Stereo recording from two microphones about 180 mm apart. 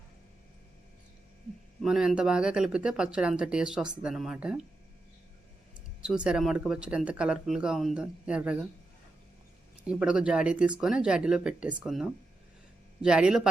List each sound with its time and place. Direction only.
1.8 s speech: 5° right (ahead or behind)
6.0 s speech: 5° right (ahead or behind)
9.8 s speech: 5° right (ahead or behind)